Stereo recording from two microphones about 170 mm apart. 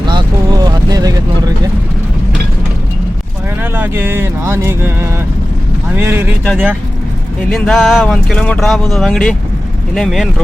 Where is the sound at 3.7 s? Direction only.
10° right (ahead or behind).